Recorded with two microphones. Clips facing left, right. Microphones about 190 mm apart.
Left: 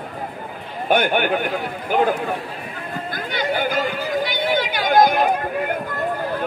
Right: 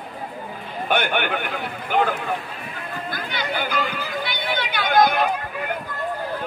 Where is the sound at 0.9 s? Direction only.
45° left (ahead or behind).